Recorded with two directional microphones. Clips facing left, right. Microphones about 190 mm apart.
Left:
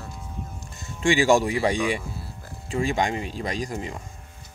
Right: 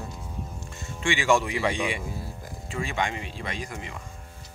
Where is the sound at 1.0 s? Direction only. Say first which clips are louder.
Left 5 dB; 40° left (ahead or behind).